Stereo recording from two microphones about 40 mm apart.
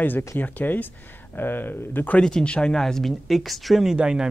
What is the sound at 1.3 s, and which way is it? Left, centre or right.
Speech, left.